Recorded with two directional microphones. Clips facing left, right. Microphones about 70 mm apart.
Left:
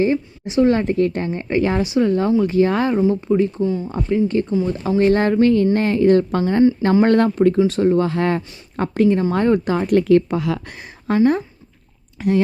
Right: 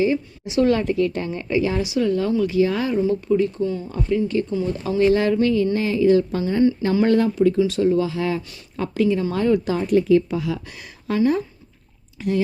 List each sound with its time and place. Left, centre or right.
0.0 s a woman's voice: left
3.0 s a woman's voice: left
10.8 s a woman's voice: left